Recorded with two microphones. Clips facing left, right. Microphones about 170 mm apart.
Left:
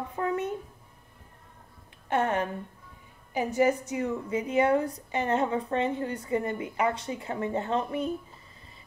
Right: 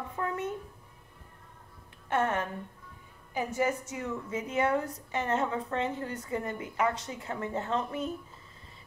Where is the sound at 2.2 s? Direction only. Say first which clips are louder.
Left 2 dB; 15° left (ahead or behind).